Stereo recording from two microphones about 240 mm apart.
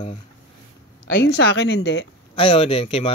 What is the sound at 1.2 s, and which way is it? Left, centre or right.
Speech, left.